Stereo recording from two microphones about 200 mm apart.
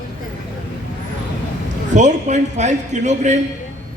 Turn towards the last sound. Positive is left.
turn(degrees=-35)  # may be behind; listen again after turning